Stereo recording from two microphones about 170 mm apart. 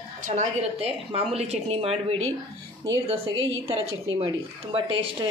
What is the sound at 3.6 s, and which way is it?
A woman's voice, 35° right (ahead or behind).